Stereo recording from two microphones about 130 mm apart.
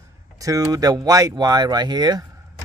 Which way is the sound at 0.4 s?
25° right (ahead or behind).